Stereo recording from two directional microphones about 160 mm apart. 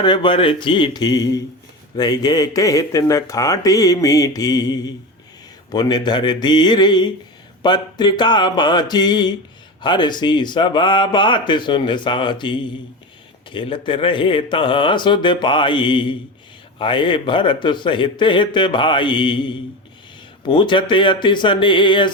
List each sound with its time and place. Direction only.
0.0 s speech: 30° left (ahead or behind)